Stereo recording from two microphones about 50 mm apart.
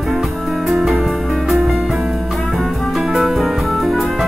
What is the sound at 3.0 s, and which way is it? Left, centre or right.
Music, centre.